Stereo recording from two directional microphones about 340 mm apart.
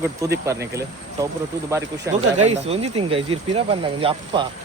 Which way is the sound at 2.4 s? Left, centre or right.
Centre.